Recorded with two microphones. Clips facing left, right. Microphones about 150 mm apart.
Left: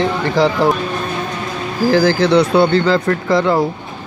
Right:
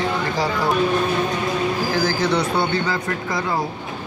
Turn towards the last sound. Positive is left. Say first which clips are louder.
# left 10 dB
turn(degrees=80)